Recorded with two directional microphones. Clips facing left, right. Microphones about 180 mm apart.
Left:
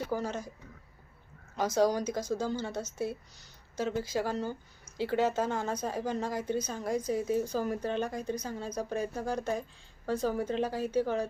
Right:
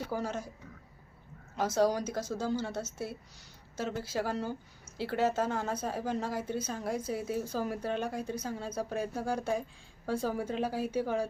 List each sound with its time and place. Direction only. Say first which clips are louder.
0.1 s speech: even; 5° right (ahead or behind)
1.5 s speech: left 1 dB; centre (ahead or behind)